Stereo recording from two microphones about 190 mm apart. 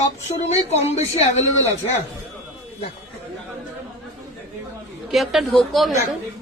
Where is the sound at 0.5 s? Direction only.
35° left (ahead or behind).